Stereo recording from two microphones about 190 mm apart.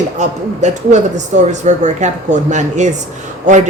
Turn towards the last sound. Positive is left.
turn(degrees=-40)  # may be behind; listen again after turning